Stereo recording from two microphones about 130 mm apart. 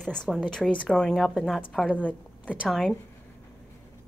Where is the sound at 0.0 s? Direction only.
5° left (ahead or behind).